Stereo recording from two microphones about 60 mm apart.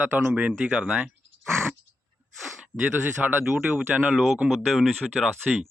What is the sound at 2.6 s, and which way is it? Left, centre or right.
Speech, right.